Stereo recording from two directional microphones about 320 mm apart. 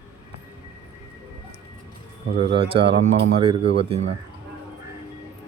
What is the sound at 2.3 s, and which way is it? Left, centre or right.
Speech, centre.